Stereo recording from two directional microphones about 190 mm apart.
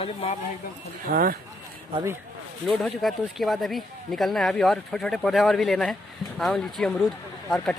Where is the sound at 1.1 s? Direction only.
50° right (ahead or behind).